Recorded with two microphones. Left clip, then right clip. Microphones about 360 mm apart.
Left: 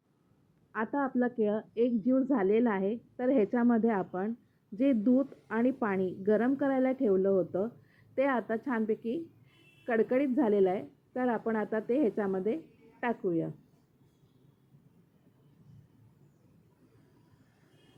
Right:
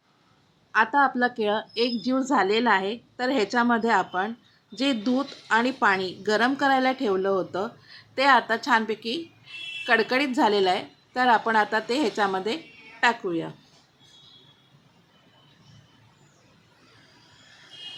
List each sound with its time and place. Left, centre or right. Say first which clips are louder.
0.7 s a woman's voice: right 12 dB; centre